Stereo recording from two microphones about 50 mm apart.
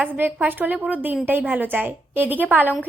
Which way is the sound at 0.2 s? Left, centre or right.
Right.